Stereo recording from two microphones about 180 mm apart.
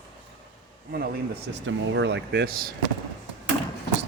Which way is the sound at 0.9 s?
55° right (ahead or behind).